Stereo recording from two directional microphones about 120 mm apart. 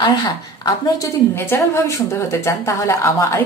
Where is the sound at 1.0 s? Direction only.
20° left (ahead or behind).